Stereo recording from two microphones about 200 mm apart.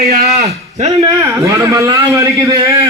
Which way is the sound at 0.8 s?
35° right (ahead or behind).